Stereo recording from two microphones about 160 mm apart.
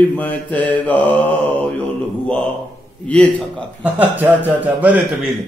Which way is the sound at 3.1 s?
5° left (ahead or behind).